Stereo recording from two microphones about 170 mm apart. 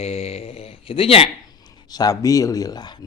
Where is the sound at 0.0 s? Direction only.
35° left (ahead or behind).